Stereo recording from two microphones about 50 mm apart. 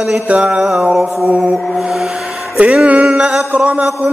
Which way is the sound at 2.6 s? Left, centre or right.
Right.